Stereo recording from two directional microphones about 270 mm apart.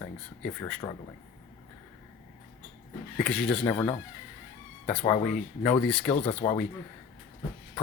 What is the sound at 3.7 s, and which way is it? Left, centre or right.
Speech, centre.